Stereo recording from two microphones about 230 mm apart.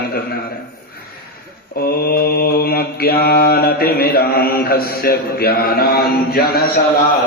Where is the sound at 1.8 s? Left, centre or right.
Left.